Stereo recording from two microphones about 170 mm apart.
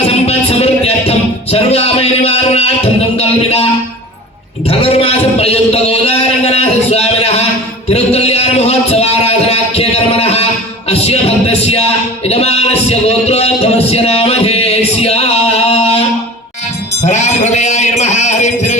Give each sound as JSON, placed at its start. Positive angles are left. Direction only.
{"t": 0.0, "sound": "music", "side_deg": 35}
{"t": 4.7, "sound": "a sound", "side_deg": 35}
{"t": 17.0, "sound": "music", "side_deg": 40}